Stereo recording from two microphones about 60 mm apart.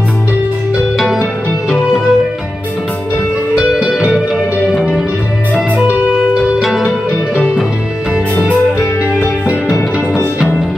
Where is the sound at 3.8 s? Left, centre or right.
Centre.